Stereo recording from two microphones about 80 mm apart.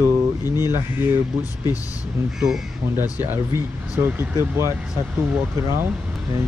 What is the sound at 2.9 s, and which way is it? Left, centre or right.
Speech, right.